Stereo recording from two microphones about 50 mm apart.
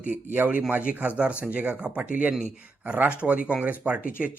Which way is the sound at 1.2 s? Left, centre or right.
Right.